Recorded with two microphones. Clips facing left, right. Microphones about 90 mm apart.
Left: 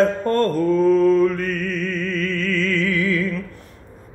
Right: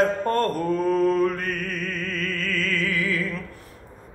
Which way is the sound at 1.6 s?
50° right (ahead or behind).